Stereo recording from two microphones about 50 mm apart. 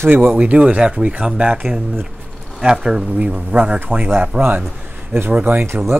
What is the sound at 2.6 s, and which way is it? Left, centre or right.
Speech, centre.